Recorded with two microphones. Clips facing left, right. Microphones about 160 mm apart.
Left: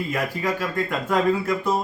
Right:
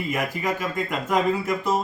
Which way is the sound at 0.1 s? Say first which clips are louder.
Right 1 dB; 15° right (ahead or behind).